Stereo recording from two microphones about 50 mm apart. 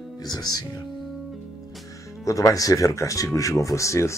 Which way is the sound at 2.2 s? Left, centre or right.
Left.